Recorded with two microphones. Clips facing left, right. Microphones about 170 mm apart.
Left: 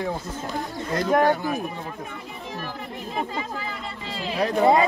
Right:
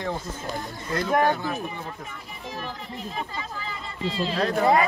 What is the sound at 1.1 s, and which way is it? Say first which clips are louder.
Speech: left 3 dB; 10° left (ahead or behind).